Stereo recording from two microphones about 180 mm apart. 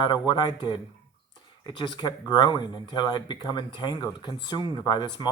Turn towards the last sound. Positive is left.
turn(degrees=25)  # may be behind; listen again after turning